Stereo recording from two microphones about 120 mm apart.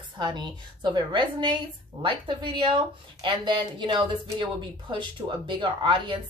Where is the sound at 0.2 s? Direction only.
40° right (ahead or behind).